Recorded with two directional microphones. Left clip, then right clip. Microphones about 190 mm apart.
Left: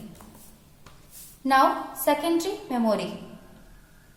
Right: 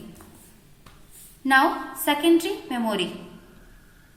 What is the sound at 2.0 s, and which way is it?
Speech, 60° left (ahead or behind).